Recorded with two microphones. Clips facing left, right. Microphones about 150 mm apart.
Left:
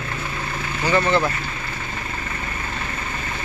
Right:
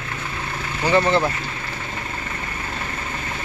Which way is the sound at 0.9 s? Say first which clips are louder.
Right 1 dB; 30° right (ahead or behind).